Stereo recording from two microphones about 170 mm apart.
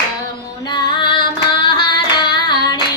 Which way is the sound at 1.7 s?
25° left (ahead or behind).